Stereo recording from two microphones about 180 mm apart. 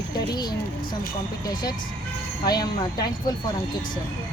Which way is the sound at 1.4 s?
20° left (ahead or behind).